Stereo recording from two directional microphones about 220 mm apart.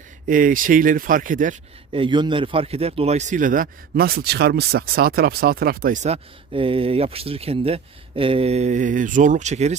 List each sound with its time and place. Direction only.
0.3 s a man's voice: 40° right (ahead or behind)
1.9 s a man's voice: 20° right (ahead or behind); by 5.9 s 40° right (ahead or behind)
6.0 s speech: 25° right (ahead or behind)